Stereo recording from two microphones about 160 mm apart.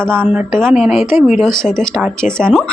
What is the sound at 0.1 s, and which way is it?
Speech, 15° right (ahead or behind).